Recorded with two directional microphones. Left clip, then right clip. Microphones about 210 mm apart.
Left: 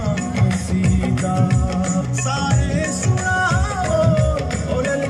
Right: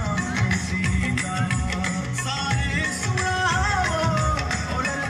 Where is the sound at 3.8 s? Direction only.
60° left (ahead or behind).